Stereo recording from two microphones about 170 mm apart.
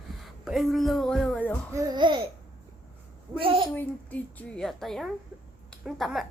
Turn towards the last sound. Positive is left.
turn(degrees=0)  # may be behind; listen again after turning